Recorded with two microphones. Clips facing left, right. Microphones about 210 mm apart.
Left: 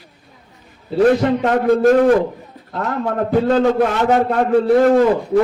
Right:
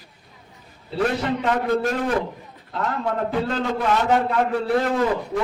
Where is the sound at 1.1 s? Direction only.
50° left (ahead or behind).